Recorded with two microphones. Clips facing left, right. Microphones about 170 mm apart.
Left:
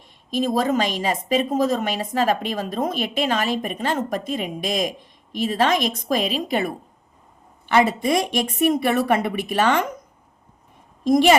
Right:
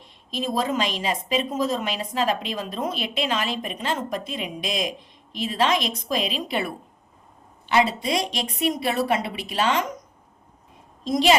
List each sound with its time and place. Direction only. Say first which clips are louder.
0.0 s a woman's voice: left 6 dB; 45° left (ahead or behind)
11.0 s a woman's voice: left 4 dB; 50° left (ahead or behind)